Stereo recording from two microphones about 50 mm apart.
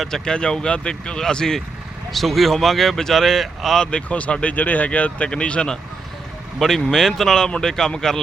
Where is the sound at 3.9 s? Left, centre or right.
Left.